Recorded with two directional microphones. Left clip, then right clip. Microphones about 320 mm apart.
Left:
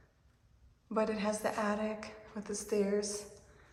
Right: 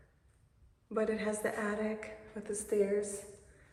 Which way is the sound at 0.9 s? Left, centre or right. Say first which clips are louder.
Even; centre.